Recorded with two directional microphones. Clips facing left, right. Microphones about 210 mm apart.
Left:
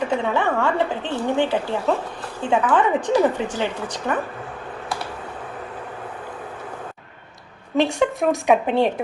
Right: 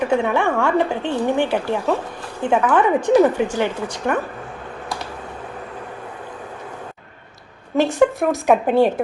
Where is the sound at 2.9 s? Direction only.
10° right (ahead or behind).